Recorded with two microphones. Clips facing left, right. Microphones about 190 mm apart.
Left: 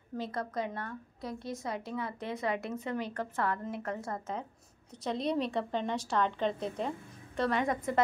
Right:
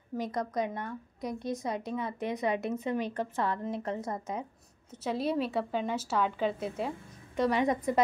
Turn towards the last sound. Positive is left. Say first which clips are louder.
# right 3 dB
turn(degrees=-20)  # may be behind; listen again after turning